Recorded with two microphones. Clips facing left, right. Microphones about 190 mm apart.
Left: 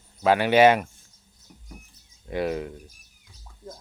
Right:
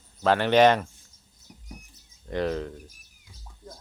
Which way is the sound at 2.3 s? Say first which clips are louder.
Left 1 dB; 10° left (ahead or behind).